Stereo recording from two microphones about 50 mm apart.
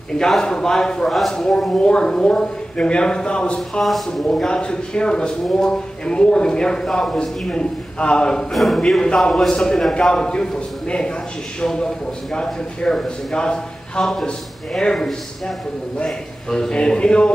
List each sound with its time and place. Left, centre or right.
0.3 s a man's voice: centre
8.5 s speech: centre
9.0 s a man's voice: centre